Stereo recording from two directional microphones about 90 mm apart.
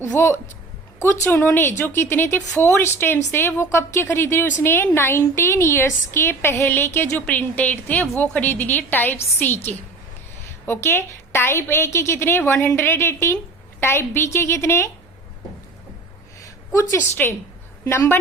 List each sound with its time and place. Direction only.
0.0 s a woman's voice: 25° left (ahead or behind)
10.7 s a woman's voice: 25° left (ahead or behind)
16.4 s a sound: 35° left (ahead or behind)
17.2 s a woman's voice: 15° left (ahead or behind)
17.8 s a woman's voice: 30° left (ahead or behind)